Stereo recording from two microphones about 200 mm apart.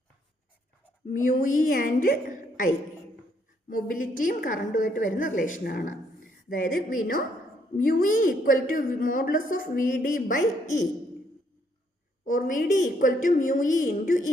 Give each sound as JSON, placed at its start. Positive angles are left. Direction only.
{"t": 1.1, "sound": "a woman's voice", "side_deg": 45}
{"t": 3.7, "sound": "a woman's voice", "side_deg": 45}
{"t": 12.2, "sound": "a woman's voice", "side_deg": 40}